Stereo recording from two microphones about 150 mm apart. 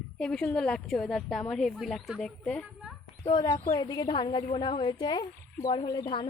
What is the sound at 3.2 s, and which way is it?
Speech, 30° left (ahead or behind).